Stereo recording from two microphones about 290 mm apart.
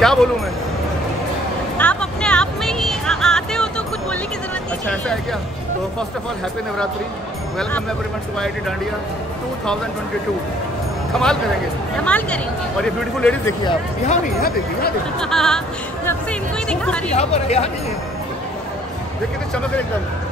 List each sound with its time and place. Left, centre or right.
0.0 s speech: centre
1.8 s music: centre
4.8 s a man's voice: centre
12.0 s a man's voice: centre
13.7 s speech: left
15.1 s a man's voice: centre
16.6 s a man's voice: centre
17.1 s speech: left